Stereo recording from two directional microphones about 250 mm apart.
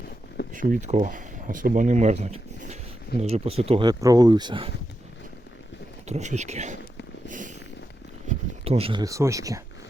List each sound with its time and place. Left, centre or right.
0.5 s speech: right
6.1 s speech: right
7.3 s a sound: right
8.6 s speech: right